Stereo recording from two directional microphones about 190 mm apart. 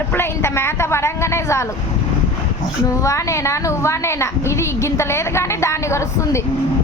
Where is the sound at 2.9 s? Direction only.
15° left (ahead or behind).